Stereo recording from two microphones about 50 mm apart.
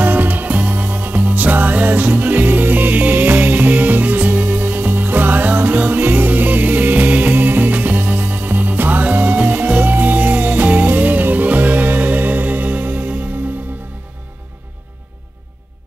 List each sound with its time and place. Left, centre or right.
0.0 s music: right